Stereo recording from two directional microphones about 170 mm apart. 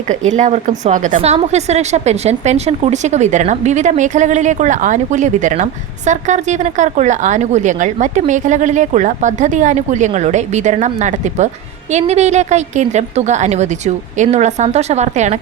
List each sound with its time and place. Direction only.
0.1 s a woman's voice: 45° right (ahead or behind)